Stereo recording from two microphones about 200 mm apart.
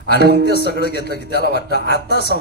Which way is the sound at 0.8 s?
55° left (ahead or behind).